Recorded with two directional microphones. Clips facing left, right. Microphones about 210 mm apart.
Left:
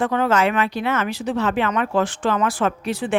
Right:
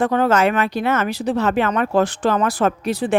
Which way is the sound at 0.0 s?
40° right (ahead or behind).